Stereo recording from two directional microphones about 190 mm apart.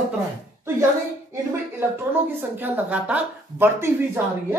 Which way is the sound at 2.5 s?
10° right (ahead or behind).